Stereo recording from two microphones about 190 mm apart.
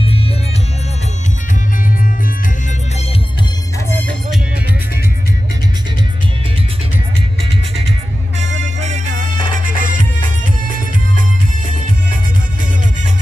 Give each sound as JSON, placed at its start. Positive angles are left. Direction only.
{"t": 0.0, "sound": "music", "side_deg": 30}
{"t": 8.8, "sound": "music", "side_deg": -40}